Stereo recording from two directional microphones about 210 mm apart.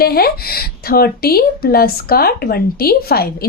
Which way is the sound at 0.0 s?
45° left (ahead or behind).